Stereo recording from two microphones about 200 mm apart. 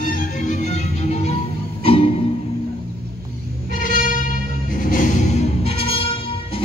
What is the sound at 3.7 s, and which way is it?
Music, 40° left (ahead or behind).